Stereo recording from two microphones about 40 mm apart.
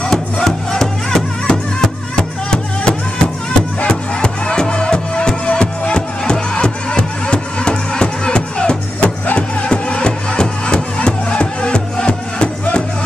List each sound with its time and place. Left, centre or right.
0.0 s music: centre
9.2 s music: left
9.7 s music: left